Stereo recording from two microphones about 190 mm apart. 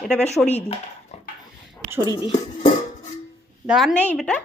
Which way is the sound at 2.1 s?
30° left (ahead or behind).